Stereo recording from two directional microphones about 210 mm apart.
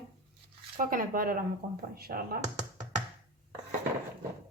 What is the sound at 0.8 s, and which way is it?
A woman's voice, 40° right (ahead or behind).